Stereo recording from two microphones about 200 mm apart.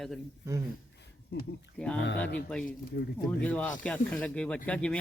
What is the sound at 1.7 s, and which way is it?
Speech, 5° left (ahead or behind).